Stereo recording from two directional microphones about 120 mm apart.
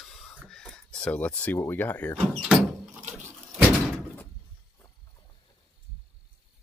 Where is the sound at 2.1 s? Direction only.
Centre (ahead or behind).